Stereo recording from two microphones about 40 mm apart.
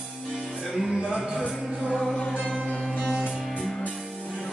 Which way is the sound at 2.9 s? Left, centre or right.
Centre.